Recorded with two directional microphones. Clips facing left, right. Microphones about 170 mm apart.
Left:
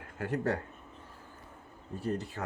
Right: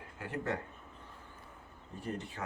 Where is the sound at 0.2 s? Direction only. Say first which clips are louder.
Left 6 dB; 40° left (ahead or behind).